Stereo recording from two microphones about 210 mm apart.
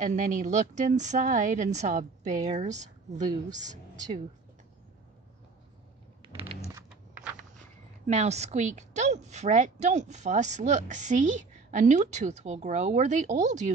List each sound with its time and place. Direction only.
0.0 s a woman's voice: 40° right (ahead or behind)
3.6 s a woman's voice: 20° right (ahead or behind)
6.2 s a sound: 25° right (ahead or behind)
8.1 s a woman's voice: 30° right (ahead or behind)